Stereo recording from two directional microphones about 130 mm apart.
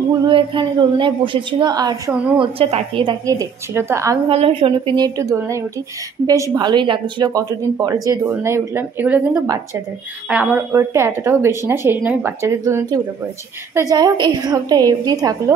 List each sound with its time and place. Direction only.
0.3 s a woman's voice: 40° right (ahead or behind)
2.3 s a woman's voice: 45° right (ahead or behind)
3.3 s a woman's voice: 25° right (ahead or behind)
4.3 s a woman's voice: 50° right (ahead or behind); by 15.3 s 30° right (ahead or behind)